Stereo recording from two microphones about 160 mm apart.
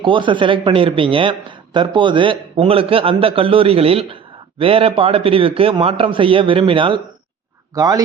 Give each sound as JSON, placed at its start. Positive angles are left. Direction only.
{"t": 0.0, "sound": "speech", "side_deg": -30}